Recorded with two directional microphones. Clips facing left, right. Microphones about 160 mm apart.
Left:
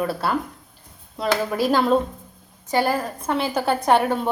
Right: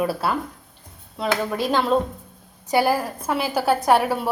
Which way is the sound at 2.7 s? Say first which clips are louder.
Right 1 dB; 10° right (ahead or behind).